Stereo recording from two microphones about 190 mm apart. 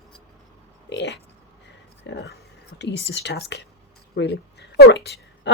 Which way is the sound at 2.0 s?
60° left (ahead or behind).